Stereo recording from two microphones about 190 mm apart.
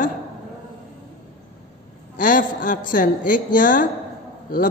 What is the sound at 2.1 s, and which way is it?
Speech, 45° left (ahead or behind).